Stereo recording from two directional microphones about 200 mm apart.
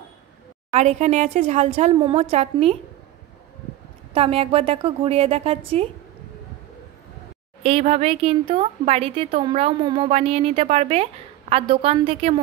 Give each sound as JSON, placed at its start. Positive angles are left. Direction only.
{"t": 0.7, "sound": "speech", "side_deg": -35}
{"t": 4.1, "sound": "speech", "side_deg": -30}
{"t": 7.6, "sound": "speech", "side_deg": -30}